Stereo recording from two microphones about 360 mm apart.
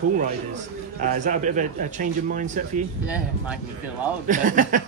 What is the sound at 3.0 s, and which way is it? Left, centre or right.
Speech, centre.